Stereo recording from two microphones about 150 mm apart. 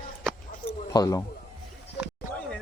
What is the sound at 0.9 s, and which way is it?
Speech, 25° left (ahead or behind).